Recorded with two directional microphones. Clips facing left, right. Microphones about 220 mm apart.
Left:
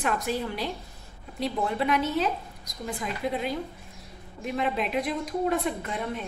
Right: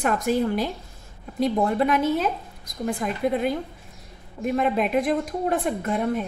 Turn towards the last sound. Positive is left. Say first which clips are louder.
# right 8 dB
turn(degrees=-50)  # may be behind; listen again after turning